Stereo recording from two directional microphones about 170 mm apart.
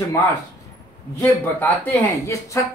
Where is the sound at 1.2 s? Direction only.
10° left (ahead or behind).